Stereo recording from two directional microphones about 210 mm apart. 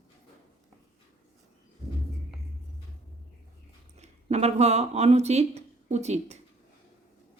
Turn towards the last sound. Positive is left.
turn(degrees=-30)  # may be behind; listen again after turning